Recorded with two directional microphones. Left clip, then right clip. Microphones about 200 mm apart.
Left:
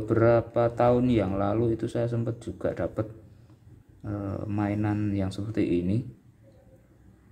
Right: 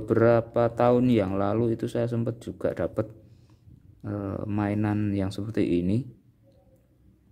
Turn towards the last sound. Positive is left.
turn(degrees=-60)  # may be behind; listen again after turning